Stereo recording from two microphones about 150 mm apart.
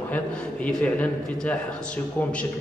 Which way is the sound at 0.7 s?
10° left (ahead or behind).